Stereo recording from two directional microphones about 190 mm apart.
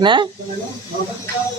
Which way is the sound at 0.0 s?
25° right (ahead or behind).